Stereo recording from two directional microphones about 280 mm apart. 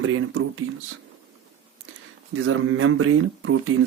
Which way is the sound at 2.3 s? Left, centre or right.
Right.